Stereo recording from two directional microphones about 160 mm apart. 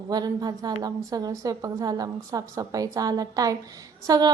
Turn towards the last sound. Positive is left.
turn(degrees=-25)  # may be behind; listen again after turning